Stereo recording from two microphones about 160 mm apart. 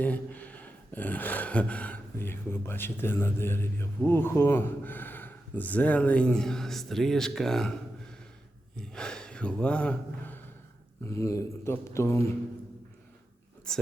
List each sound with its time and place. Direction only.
0.0 s speech: 10° left (ahead or behind)
8.7 s speech: 5° left (ahead or behind)
13.7 s speech: 5° left (ahead or behind)